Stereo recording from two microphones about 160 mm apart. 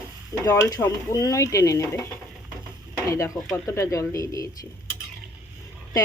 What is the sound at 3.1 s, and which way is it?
Speech, 20° left (ahead or behind).